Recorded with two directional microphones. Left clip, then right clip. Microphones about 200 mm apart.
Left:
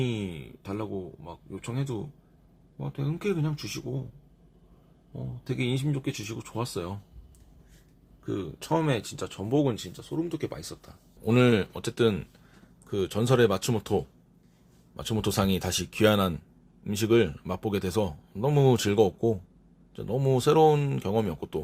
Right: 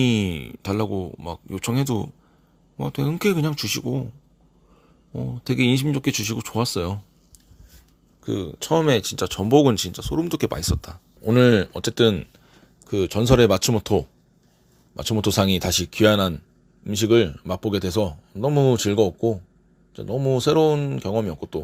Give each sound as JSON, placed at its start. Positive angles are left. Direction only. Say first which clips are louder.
{"t": 0.0, "sound": "speech", "louder": "right 10 dB", "side_deg": -50}
{"t": 5.1, "sound": "speech", "louder": "right 10 dB", "side_deg": -45}
{"t": 8.2, "sound": "speech", "louder": "right 6 dB", "side_deg": -35}
{"t": 11.2, "sound": "speech", "louder": "right 6 dB", "side_deg": -15}